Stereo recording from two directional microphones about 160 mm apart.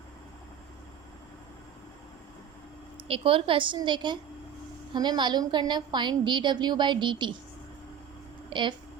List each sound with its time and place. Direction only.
3.1 s a woman's voice: 35° right (ahead or behind)
8.4 s speech: 30° right (ahead or behind)